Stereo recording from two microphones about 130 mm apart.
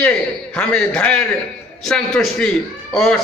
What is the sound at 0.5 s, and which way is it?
A man's voice, 10° left (ahead or behind).